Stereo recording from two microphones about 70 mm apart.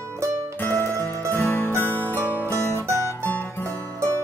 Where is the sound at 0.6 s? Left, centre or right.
Left.